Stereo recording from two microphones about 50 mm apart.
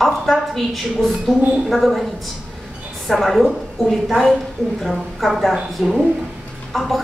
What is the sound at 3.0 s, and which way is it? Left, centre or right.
A woman's voice, centre.